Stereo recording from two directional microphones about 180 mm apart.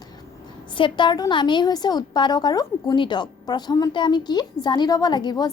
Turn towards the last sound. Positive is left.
turn(degrees=25)  # may be behind; listen again after turning